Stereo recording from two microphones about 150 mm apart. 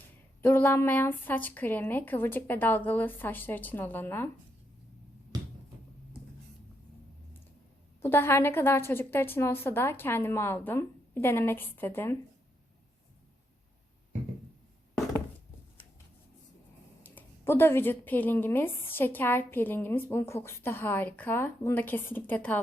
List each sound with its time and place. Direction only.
0.4 s speech: 15° left (ahead or behind)
8.0 s speech: 15° left (ahead or behind)
17.0 s speech: 15° left (ahead or behind)